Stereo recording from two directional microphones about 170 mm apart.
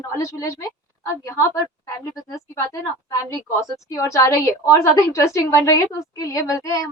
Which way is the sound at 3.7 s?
20° left (ahead or behind).